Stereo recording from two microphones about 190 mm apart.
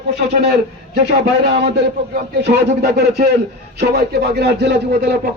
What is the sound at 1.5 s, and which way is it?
A man's voice, 65° right (ahead or behind).